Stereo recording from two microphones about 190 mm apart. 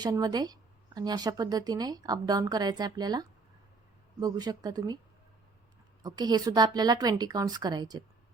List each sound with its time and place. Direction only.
0.0 s speech: 20° right (ahead or behind)
6.0 s speech: 20° right (ahead or behind)